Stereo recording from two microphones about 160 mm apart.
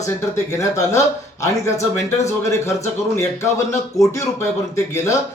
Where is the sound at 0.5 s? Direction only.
20° left (ahead or behind).